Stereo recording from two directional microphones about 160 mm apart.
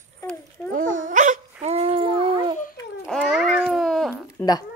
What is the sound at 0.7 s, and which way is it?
Dog, 55° right (ahead or behind).